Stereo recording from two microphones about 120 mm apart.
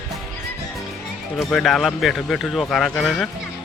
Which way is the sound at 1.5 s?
Centre (ahead or behind).